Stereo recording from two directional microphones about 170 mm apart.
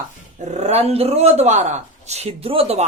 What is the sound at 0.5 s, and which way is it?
Speech, 40° right (ahead or behind).